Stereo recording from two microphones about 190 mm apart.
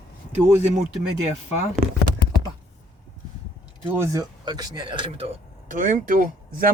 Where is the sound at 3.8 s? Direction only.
15° right (ahead or behind).